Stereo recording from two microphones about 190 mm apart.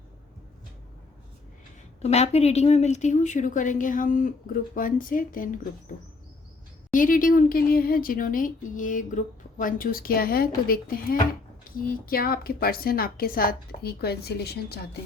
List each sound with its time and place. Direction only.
2.0 s a woman's voice: 35° left (ahead or behind)
6.9 s a woman's voice: 45° left (ahead or behind)